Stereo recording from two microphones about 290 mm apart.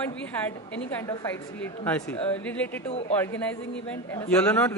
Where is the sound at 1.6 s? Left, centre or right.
Centre.